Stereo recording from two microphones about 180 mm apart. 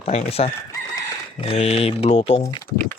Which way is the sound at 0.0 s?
35° left (ahead or behind).